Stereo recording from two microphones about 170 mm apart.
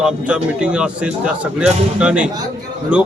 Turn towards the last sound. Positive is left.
turn(degrees=-5)  # may be behind; listen again after turning